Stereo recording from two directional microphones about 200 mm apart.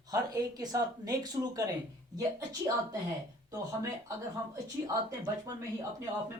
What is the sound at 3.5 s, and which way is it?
Speech, 15° right (ahead or behind).